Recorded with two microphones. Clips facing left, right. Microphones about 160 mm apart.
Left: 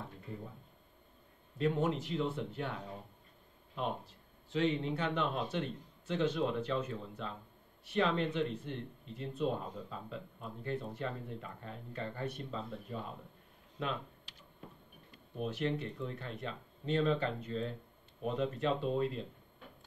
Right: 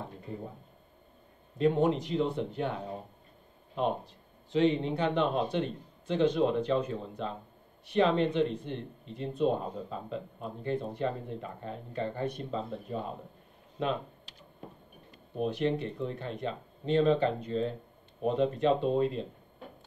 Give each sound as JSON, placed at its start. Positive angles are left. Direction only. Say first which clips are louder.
{"t": 0.0, "sound": "speech", "louder": "right 5 dB", "side_deg": -25}
{"t": 1.6, "sound": "speech", "louder": "right 6 dB", "side_deg": -25}
{"t": 15.3, "sound": "speech", "louder": "right 6 dB", "side_deg": -25}